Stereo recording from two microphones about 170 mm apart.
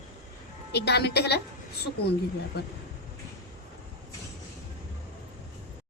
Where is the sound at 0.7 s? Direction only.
75° left (ahead or behind).